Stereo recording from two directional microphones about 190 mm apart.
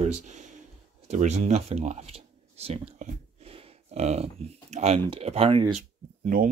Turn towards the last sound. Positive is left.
turn(degrees=-45)  # may be behind; listen again after turning